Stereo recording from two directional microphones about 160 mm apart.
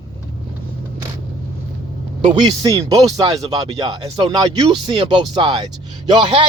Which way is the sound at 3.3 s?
35° right (ahead or behind).